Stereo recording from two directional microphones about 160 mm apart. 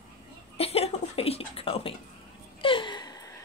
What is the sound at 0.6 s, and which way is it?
Chuckle, 40° left (ahead or behind).